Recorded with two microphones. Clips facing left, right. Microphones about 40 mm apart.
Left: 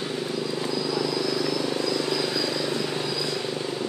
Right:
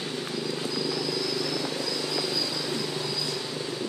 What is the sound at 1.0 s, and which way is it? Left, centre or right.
Vehicle, centre.